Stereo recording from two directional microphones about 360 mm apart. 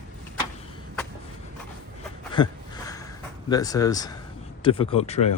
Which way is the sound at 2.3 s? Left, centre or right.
Centre.